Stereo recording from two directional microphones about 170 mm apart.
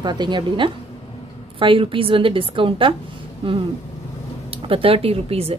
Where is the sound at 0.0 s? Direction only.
25° right (ahead or behind).